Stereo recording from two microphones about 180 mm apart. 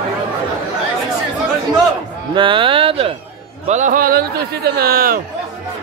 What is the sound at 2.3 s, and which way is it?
Speech, 30° right (ahead or behind).